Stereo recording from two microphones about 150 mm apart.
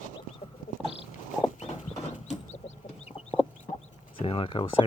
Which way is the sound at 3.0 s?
45° left (ahead or behind).